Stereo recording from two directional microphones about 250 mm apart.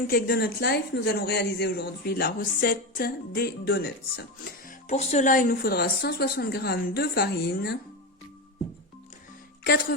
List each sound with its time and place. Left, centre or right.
0.1 s speech: left
4.9 s speech: left